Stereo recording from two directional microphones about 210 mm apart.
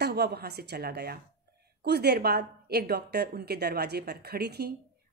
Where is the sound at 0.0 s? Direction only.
50° right (ahead or behind).